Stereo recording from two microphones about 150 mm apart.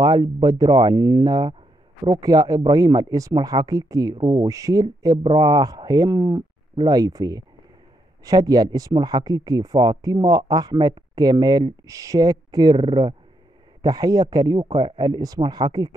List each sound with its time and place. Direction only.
0.0 s speech: 25° right (ahead or behind)